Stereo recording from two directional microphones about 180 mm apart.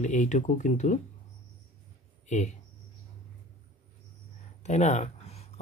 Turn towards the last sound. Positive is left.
turn(degrees=35)  # may be behind; listen again after turning